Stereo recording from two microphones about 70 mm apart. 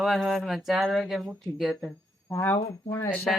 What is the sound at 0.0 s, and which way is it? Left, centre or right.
Speech, centre.